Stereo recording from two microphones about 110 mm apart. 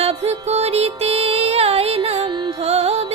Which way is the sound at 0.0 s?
75° right (ahead or behind).